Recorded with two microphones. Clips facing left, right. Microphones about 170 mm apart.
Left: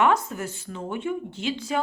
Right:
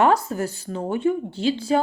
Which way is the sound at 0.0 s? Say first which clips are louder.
Right 3 dB; 35° right (ahead or behind).